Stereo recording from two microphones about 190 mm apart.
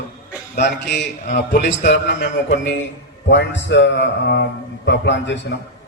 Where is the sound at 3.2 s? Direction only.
70° left (ahead or behind).